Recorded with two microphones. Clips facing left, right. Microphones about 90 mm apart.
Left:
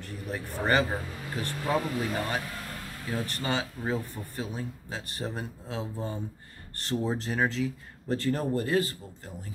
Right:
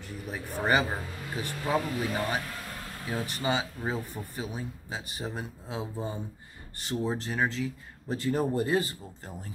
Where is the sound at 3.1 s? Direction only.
15° right (ahead or behind).